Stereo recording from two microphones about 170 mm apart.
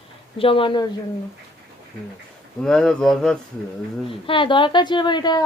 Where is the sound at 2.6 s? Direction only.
5° left (ahead or behind).